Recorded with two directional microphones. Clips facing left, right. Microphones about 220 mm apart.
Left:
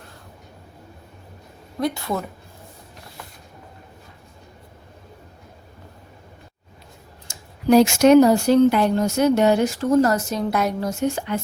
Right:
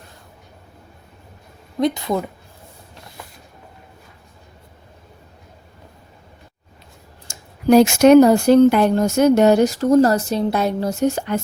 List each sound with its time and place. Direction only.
1.8 s speech: 20° right (ahead or behind)
7.3 s speech: 50° right (ahead or behind); by 10.9 s 30° right (ahead or behind)
11.0 s speech: 40° right (ahead or behind)